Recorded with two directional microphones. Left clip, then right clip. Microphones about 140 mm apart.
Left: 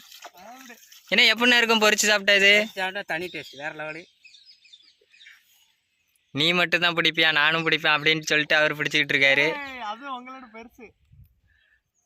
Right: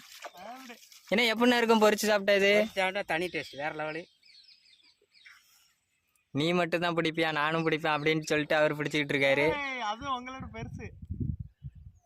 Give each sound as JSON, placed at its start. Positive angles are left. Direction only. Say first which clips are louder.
{"t": 0.2, "sound": "water", "louder": "right 1 dB", "side_deg": -15}
{"t": 1.0, "sound": "speech", "louder": "left 7 dB", "side_deg": -15}
{"t": 2.7, "sound": "speech", "louder": "left 1 dB", "side_deg": -25}
{"t": 6.3, "sound": "speech", "louder": "left 7 dB", "side_deg": -5}
{"t": 10.6, "sound": "speech", "louder": "even", "side_deg": -5}